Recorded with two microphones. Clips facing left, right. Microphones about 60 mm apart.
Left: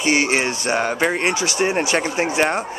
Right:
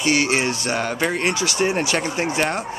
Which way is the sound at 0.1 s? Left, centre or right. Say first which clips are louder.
Left 1 dB; centre.